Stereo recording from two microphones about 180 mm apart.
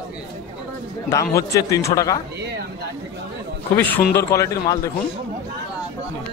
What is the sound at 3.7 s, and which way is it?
Speech, 10° left (ahead or behind).